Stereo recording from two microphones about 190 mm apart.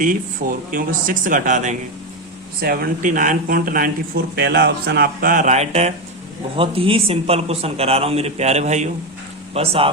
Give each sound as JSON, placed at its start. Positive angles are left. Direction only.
{"t": 0.7, "sound": "speech", "side_deg": -45}
{"t": 2.6, "sound": "speech", "side_deg": -50}
{"t": 4.4, "sound": "speech", "side_deg": -60}